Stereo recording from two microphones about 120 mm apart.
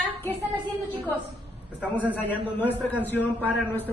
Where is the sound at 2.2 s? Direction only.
15° left (ahead or behind).